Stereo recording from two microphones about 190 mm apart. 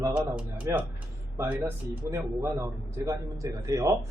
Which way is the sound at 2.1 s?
15° right (ahead or behind).